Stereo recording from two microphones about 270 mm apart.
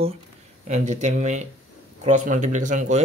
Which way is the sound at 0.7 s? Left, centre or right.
Right.